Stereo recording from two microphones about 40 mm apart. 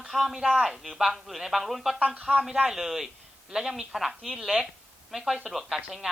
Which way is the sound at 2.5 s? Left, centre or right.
Centre.